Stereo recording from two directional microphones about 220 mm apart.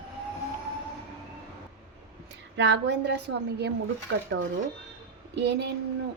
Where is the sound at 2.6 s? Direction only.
50° right (ahead or behind).